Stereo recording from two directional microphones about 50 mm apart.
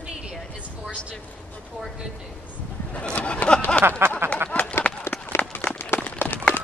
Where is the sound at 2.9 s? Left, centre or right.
Left.